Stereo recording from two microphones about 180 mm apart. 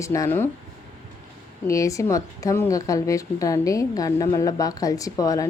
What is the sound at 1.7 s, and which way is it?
A woman's voice, 15° left (ahead or behind).